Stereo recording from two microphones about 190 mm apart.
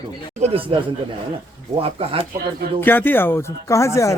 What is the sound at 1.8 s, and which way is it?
Speech, 30° right (ahead or behind).